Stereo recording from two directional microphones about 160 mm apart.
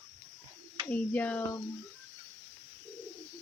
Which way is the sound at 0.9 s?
10° left (ahead or behind).